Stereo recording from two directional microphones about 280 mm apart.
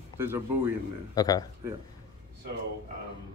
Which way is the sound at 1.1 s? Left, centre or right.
Centre.